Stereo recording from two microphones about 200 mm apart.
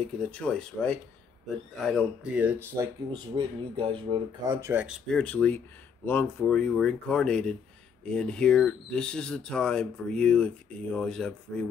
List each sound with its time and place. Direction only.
0.2 s speech: 5° left (ahead or behind); by 3.2 s 15° right (ahead or behind)
3.3 s speech: 25° right (ahead or behind)
4.6 s speech: 10° right (ahead or behind)